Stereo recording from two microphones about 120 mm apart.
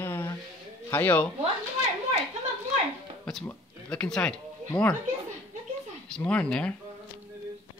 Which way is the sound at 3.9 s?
5° left (ahead or behind).